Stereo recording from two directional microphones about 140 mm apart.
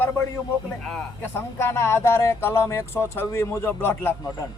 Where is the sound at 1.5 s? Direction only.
20° left (ahead or behind).